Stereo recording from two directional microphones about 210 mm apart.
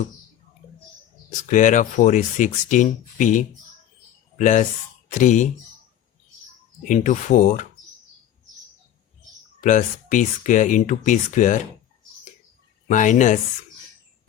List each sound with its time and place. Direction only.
1.3 s speech: 35° left (ahead or behind)
6.8 s speech: 35° left (ahead or behind)
9.6 s speech: 35° left (ahead or behind)
12.9 s speech: 35° left (ahead or behind)